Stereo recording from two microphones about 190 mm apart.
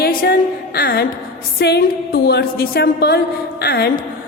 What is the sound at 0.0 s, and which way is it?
A woman's voice, 50° left (ahead or behind).